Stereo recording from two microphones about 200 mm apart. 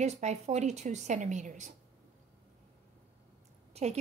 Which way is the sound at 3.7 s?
30° right (ahead or behind).